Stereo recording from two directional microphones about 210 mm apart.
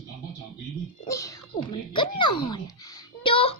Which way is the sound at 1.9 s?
20° left (ahead or behind).